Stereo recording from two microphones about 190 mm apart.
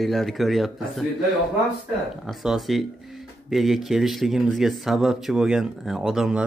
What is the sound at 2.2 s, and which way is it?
Speech, centre (ahead or behind).